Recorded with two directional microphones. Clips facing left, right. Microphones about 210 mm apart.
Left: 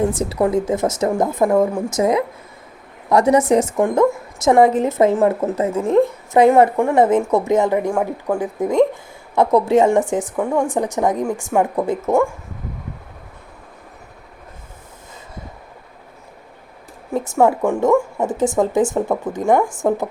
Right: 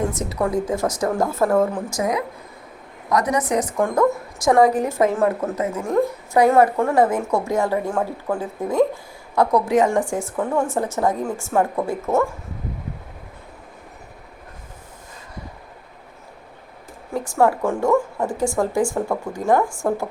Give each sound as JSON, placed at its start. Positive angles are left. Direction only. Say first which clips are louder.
{"t": 0.1, "sound": "a woman's voice", "louder": "left 4 dB", "side_deg": 30}
{"t": 17.2, "sound": "a woman's voice", "louder": "left 3 dB", "side_deg": 20}